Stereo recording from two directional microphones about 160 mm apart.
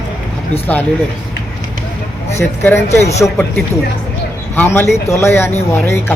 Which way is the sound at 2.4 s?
15° left (ahead or behind).